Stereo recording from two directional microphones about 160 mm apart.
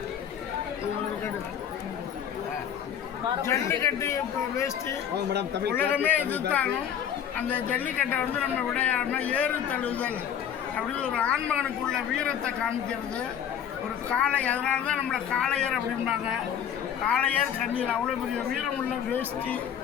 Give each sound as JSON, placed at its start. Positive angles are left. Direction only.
{"t": 3.4, "sound": "speech", "side_deg": 20}
{"t": 5.3, "sound": "speech", "side_deg": -90}
{"t": 5.7, "sound": "a man's voice", "side_deg": 10}